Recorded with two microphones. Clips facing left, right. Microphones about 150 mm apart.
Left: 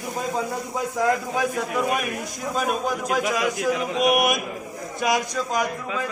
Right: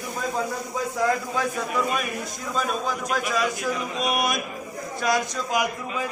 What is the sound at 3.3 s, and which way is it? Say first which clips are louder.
A man's voice: left 2 dB; 15° left (ahead or behind).